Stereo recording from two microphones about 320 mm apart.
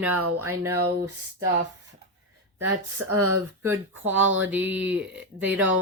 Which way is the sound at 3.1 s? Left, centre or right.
Right.